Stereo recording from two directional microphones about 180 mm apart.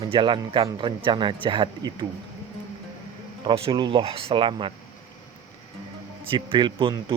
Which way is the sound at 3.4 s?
30° right (ahead or behind).